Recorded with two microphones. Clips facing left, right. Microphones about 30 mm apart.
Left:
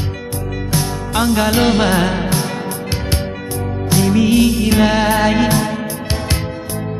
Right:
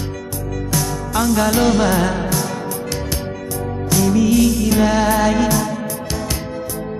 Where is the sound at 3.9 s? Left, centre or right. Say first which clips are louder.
Left 2 dB; left.